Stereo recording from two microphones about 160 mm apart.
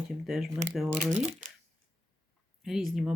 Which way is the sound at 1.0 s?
50° right (ahead or behind).